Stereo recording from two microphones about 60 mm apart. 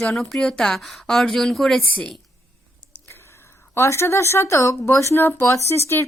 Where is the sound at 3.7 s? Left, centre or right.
Left.